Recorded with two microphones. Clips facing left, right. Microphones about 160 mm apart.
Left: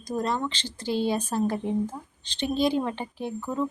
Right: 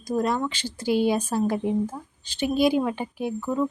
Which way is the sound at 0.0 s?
10° right (ahead or behind).